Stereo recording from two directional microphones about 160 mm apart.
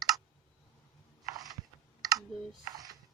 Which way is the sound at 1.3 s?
25° right (ahead or behind).